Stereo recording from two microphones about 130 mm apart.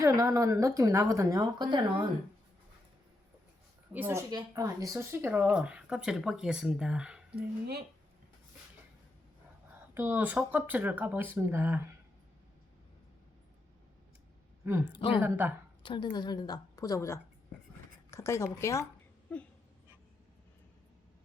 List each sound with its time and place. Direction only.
0.0 s a woman's voice: 25° right (ahead or behind)
3.9 s speech: 15° right (ahead or behind)
4.3 s speech: 30° right (ahead or behind); by 7.2 s 5° right (ahead or behind)
9.9 s speech: 15° right (ahead or behind)
14.6 s speech: 20° right (ahead or behind)
15.8 s a woman's voice: 40° left (ahead or behind); by 18.9 s 20° left (ahead or behind)